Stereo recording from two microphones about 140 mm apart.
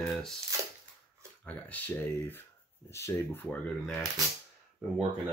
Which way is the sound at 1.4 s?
10° left (ahead or behind).